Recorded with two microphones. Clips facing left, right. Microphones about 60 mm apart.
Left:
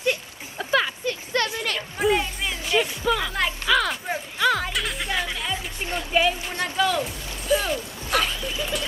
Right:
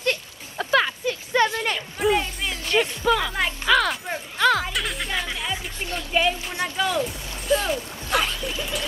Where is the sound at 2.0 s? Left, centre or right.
Centre.